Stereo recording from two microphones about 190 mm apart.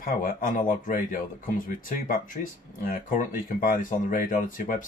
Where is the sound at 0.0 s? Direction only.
45° left (ahead or behind).